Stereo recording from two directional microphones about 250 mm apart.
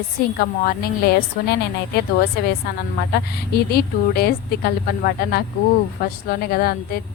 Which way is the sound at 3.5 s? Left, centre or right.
Left.